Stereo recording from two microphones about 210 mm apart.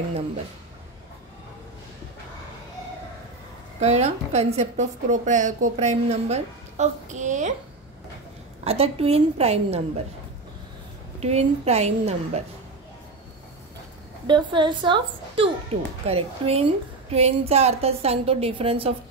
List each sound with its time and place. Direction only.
3.8 s a woman's voice: 30° right (ahead or behind)
8.6 s a woman's voice: 30° right (ahead or behind)
11.1 s a woman's voice: 30° right (ahead or behind)
14.2 s a woman's voice: 20° right (ahead or behind)